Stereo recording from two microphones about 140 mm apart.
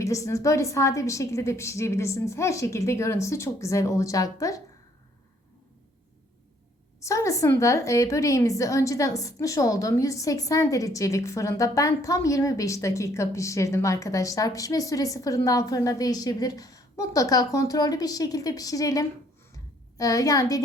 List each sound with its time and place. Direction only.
0.0 s a woman's voice: 20° left (ahead or behind)
7.0 s a woman's voice: 20° left (ahead or behind)